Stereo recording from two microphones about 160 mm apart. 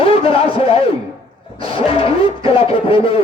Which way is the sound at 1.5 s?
35° left (ahead or behind).